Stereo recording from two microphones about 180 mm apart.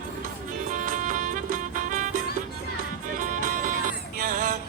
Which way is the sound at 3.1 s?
45° right (ahead or behind).